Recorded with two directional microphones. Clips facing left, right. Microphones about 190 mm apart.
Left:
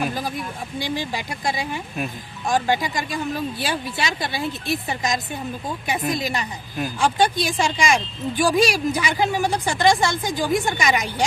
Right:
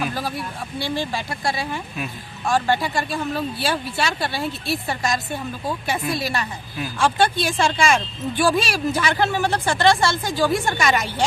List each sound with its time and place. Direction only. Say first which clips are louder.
0.1 s speech: even; 15° left (ahead or behind)